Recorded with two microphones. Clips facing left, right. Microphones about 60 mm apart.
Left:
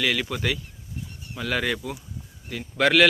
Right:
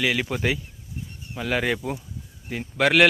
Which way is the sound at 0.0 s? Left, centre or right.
Centre.